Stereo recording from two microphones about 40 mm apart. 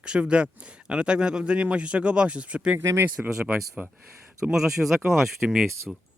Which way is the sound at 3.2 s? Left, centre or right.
Centre.